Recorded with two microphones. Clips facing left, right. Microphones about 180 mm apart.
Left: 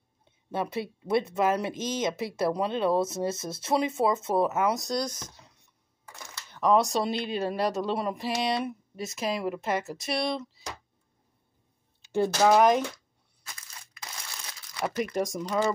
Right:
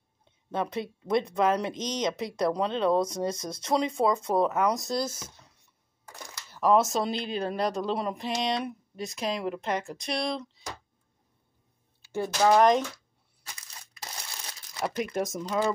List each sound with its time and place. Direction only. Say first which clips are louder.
0.5 s speech: even; 5° left (ahead or behind)
6.5 s speech: even; centre (ahead or behind)
12.0 s a sound: left 5 dB; 20° left (ahead or behind)
12.4 s speech: right 1 dB; 5° left (ahead or behind)
13.9 s crumpling: right 2 dB; 35° right (ahead or behind)
14.8 s speech: left 1 dB; centre (ahead or behind)